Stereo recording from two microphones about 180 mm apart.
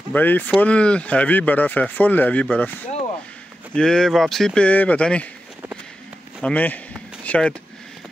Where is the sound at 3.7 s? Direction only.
5° left (ahead or behind).